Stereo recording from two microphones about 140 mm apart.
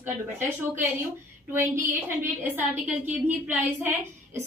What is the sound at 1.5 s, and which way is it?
A woman's voice, 15° right (ahead or behind).